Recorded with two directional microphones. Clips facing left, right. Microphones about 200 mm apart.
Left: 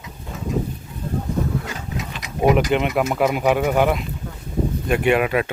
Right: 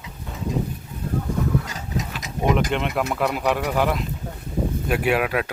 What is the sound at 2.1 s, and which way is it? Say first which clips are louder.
Speech: left 5 dB; centre (ahead or behind).